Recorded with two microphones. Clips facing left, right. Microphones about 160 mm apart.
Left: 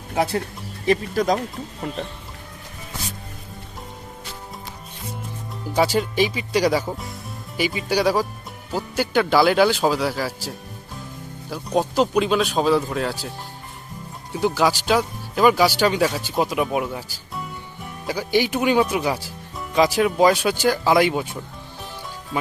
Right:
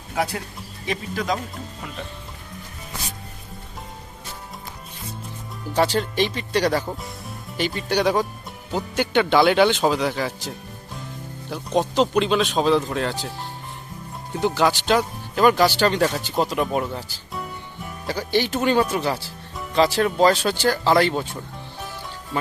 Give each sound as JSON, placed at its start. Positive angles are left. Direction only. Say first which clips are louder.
{"t": 0.9, "sound": "speech", "louder": "left 6 dB", "side_deg": 40}
{"t": 5.7, "sound": "speech", "louder": "left 1 dB", "side_deg": 10}
{"t": 11.5, "sound": "speech", "louder": "even", "side_deg": 10}
{"t": 14.3, "sound": "speech", "louder": "even", "side_deg": 5}